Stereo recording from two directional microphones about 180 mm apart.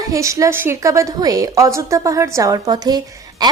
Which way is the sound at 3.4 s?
20° right (ahead or behind).